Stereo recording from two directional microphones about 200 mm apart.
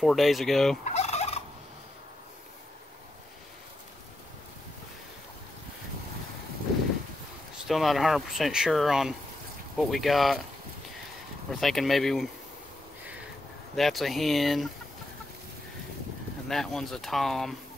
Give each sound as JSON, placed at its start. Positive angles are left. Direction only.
{"t": 0.0, "sound": "speech", "side_deg": 0}
{"t": 0.8, "sound": "fowl", "side_deg": 35}
{"t": 7.6, "sound": "speech", "side_deg": 0}
{"t": 11.6, "sound": "speech", "side_deg": 0}
{"t": 13.7, "sound": "speech", "side_deg": 0}
{"t": 16.4, "sound": "speech", "side_deg": 0}